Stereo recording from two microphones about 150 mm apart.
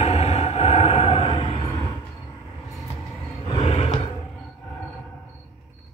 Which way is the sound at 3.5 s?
35° left (ahead or behind).